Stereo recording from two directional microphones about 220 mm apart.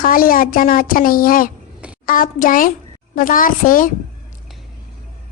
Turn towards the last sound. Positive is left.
turn(degrees=40)  # may be behind; listen again after turning